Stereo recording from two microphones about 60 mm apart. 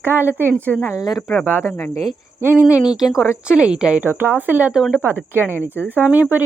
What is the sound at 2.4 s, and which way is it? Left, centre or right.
Speech, right.